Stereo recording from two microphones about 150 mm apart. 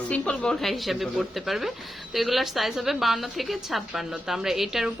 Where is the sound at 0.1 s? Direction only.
5° left (ahead or behind).